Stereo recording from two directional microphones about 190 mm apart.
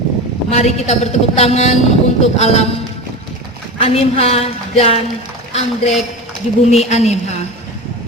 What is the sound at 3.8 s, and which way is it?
A man's voice, 30° left (ahead or behind).